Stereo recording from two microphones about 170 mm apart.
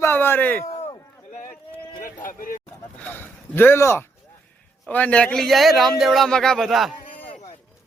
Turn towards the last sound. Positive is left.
turn(degrees=0)  # may be behind; listen again after turning